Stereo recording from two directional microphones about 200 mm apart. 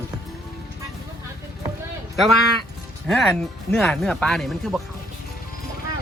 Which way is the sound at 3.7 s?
5° left (ahead or behind).